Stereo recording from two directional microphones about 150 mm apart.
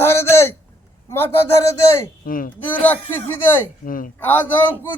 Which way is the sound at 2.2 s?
65° left (ahead or behind).